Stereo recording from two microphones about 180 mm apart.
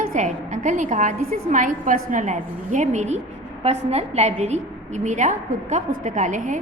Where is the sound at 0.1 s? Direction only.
40° right (ahead or behind).